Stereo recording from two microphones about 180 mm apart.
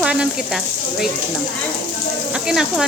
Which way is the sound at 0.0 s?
5° right (ahead or behind).